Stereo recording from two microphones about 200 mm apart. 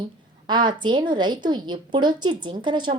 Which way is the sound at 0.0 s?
20° right (ahead or behind).